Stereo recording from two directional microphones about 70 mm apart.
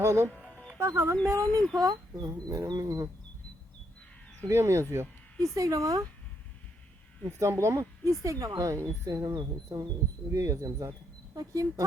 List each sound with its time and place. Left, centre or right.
0.0 s speech: right
0.5 s music: centre
0.8 s speech: right
1.8 s speech: right
4.4 s speech: right
5.5 s speech: right
7.3 s speech: right
10.3 s speech: right